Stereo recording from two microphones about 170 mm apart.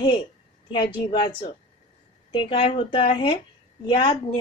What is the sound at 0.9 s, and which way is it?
Speech, 30° left (ahead or behind).